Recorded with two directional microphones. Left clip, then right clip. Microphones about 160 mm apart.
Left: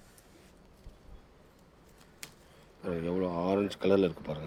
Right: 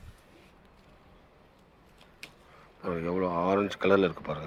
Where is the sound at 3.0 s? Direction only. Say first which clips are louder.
Right 4 dB; 20° left (ahead or behind).